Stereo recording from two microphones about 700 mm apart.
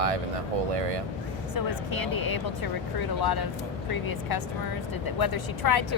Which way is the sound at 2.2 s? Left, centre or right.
Left.